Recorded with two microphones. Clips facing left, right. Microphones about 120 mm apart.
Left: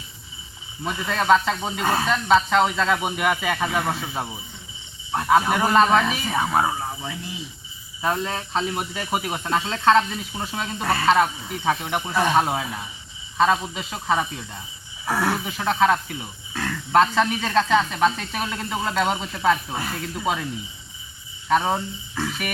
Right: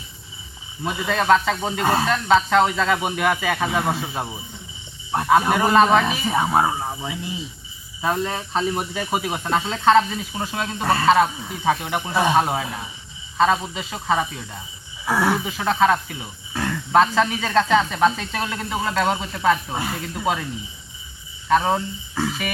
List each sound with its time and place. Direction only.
0.9 s speech: 5° right (ahead or behind)
6.3 s speech: 20° right (ahead or behind); by 20.5 s centre (ahead or behind)
21.5 s speech: centre (ahead or behind)